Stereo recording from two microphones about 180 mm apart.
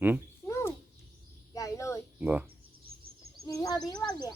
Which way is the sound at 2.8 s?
55° right (ahead or behind).